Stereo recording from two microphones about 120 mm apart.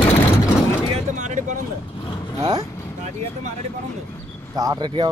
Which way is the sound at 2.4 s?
30° right (ahead or behind).